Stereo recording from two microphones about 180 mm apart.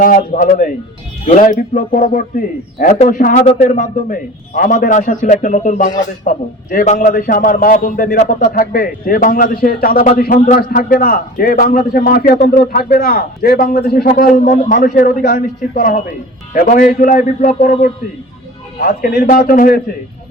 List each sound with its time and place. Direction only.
0.0 s a man's voice: 50° left (ahead or behind)
18.8 s a man's voice: 55° left (ahead or behind)